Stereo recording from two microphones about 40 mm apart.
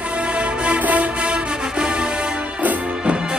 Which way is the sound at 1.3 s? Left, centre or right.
Right.